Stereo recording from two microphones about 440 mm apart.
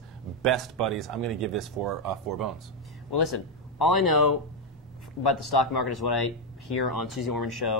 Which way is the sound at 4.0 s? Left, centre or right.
Left.